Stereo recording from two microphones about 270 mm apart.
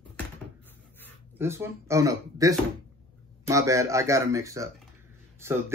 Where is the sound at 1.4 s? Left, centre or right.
Centre.